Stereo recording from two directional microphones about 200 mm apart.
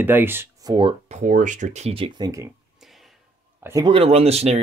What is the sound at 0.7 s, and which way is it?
Speech, 30° right (ahead or behind).